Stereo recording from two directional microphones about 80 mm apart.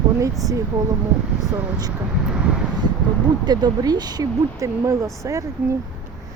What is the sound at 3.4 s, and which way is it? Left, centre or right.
Speech, right.